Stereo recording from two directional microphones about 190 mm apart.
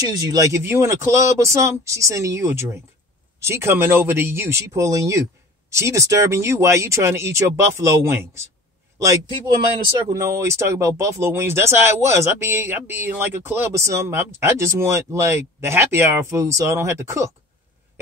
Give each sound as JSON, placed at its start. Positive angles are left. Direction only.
{"t": 0.0, "sound": "a man's voice", "side_deg": -20}